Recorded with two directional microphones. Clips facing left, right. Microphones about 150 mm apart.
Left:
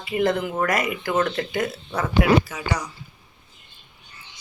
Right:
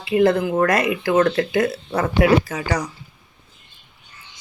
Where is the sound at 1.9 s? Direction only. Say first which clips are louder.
Right 2 dB; 45° right (ahead or behind).